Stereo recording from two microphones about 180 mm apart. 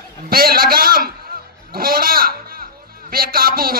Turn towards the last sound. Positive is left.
turn(degrees=-55)  # may be behind; listen again after turning